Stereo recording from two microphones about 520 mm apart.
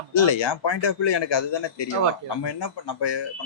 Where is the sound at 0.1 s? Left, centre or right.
Left.